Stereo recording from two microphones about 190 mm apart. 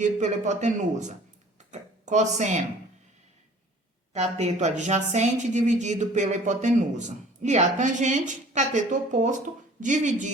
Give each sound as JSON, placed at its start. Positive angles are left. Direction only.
{"t": 0.0, "sound": "a woman's voice", "side_deg": -40}
{"t": 4.1, "sound": "a woman's voice", "side_deg": -35}